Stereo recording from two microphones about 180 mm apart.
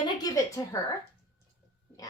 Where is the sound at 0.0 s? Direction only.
20° left (ahead or behind).